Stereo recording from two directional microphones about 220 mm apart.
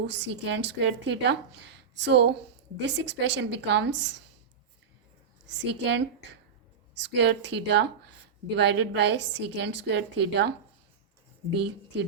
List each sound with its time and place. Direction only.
0.1 s a woman's voice: 55° right (ahead or behind)
5.5 s a woman's voice: 50° right (ahead or behind)